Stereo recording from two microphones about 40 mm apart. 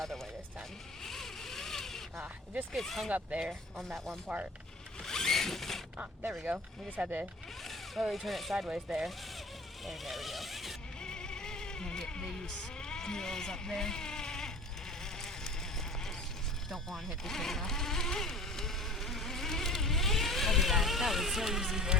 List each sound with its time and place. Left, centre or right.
0.0 s sheep: centre
1.0 s a sound: centre
2.8 s speech: centre
3.1 s speech: right
5.0 s zipper: centre
6.4 s speech: right
7.6 s speech: centre
8.5 s speech: centre
9.8 s a sound: centre
11.0 s music: centre
16.6 s speech: centre
17.2 s insect: centre